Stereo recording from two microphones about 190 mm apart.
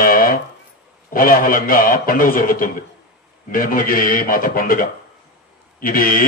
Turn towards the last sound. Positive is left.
turn(degrees=45)  # may be behind; listen again after turning